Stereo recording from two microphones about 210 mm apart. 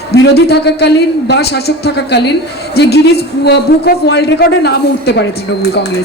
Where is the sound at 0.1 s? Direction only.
50° left (ahead or behind).